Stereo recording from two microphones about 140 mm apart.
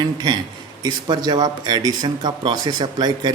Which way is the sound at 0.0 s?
30° right (ahead or behind).